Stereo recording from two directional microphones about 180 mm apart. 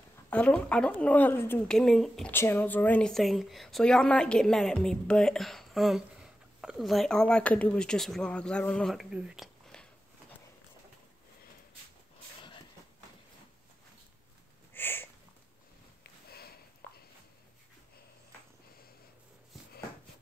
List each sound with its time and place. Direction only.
0.3 s a woman's voice: 5° left (ahead or behind)
14.7 s a sound: 10° left (ahead or behind)
16.0 s sniff: 60° left (ahead or behind)